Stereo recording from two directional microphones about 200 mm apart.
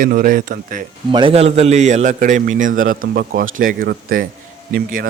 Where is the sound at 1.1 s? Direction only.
25° right (ahead or behind); by 5.1 s 45° right (ahead or behind).